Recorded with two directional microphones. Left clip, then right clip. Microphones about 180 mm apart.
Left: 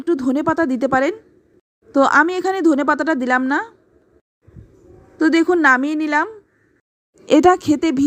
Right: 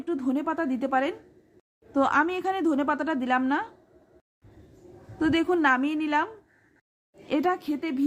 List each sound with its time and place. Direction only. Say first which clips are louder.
0.0 s speech: left 10 dB; 35° left (ahead or behind)
5.2 s speech: left 9 dB; 30° left (ahead or behind)
7.3 s speech: left 13 dB; 40° left (ahead or behind)